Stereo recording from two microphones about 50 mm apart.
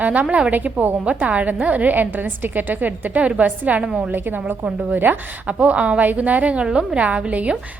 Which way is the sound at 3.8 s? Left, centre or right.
Centre.